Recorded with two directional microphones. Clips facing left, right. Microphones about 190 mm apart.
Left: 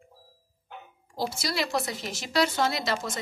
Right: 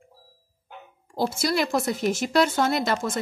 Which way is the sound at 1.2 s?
50° right (ahead or behind).